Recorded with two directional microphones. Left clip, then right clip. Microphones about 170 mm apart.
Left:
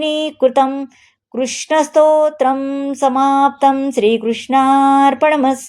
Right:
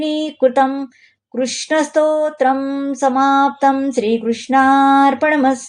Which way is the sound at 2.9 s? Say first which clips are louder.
Left 1 dB; 30° left (ahead or behind).